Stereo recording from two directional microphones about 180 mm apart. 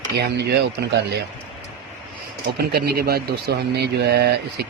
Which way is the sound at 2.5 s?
60° right (ahead or behind).